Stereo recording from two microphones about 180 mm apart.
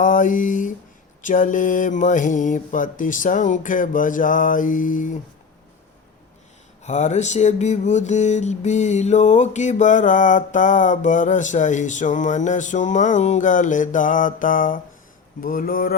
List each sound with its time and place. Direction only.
0.0 s mantra: 45° left (ahead or behind)
6.8 s mantra: 40° left (ahead or behind)